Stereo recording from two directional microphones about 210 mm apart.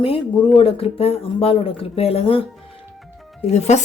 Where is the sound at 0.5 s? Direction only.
25° left (ahead or behind).